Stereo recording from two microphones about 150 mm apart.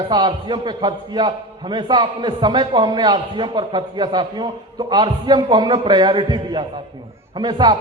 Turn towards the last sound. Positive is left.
turn(degrees=-30)  # may be behind; listen again after turning